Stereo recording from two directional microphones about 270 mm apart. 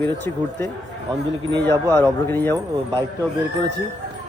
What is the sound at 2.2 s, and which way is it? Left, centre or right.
Speech, centre.